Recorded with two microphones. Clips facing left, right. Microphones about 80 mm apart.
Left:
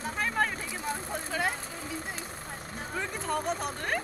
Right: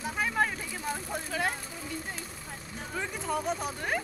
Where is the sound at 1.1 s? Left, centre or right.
Centre.